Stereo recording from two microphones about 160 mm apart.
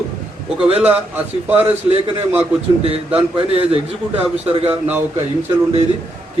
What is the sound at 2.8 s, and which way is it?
A man's voice, 40° right (ahead or behind).